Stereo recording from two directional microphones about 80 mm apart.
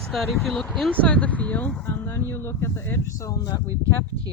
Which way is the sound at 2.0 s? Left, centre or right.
Left.